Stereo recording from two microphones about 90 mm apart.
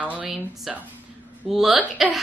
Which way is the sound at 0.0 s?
15° right (ahead or behind).